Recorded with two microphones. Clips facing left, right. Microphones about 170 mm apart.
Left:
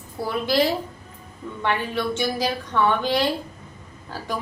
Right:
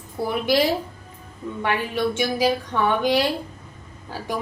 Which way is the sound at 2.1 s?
15° right (ahead or behind).